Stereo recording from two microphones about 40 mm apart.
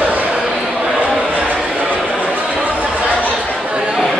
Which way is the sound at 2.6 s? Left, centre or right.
Right.